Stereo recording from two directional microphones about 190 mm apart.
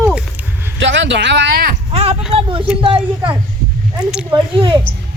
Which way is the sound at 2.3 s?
25° right (ahead or behind).